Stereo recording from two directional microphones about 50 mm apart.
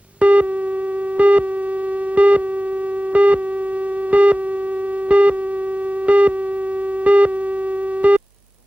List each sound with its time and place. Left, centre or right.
0.2 s busy signal: right
3.1 s music: right
4.1 s busy signal: right
6.1 s music: right
7.0 s synthesizer: right
8.0 s music: right